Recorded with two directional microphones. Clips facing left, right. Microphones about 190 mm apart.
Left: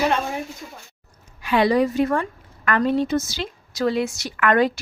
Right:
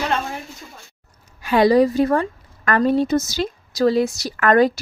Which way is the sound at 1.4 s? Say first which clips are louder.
Right 4 dB; 40° right (ahead or behind).